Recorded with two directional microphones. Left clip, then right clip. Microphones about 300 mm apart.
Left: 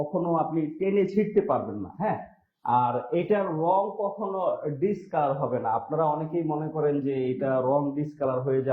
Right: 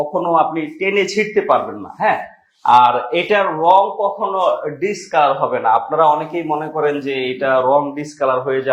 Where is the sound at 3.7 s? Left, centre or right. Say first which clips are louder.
Right 14 dB; right.